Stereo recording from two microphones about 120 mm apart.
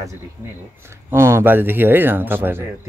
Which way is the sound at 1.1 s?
20° right (ahead or behind).